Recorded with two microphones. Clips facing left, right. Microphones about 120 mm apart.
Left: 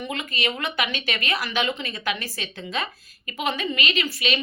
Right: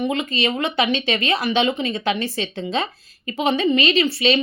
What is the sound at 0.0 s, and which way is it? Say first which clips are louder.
Speech: right 7 dB; 20° right (ahead or behind).